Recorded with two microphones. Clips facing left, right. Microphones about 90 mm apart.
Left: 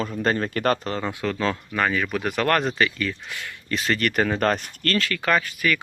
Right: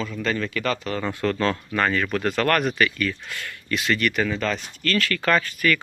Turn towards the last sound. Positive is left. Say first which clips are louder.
# right 1 dB
turn(degrees=15)  # may be behind; listen again after turning